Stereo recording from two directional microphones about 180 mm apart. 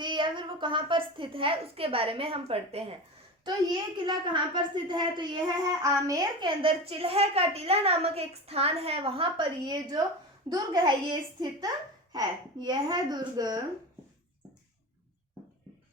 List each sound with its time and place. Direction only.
0.0 s a woman's voice: 25° right (ahead or behind)